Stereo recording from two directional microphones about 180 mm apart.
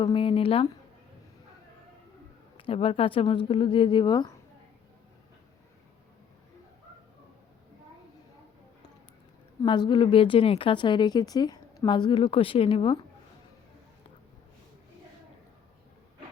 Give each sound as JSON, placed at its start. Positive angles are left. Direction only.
{"t": 0.0, "sound": "speech", "side_deg": 30}
{"t": 2.6, "sound": "a woman's voice", "side_deg": 30}
{"t": 9.6, "sound": "a woman's voice", "side_deg": 25}